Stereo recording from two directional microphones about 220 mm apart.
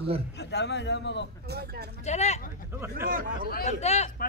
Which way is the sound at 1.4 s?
50° right (ahead or behind).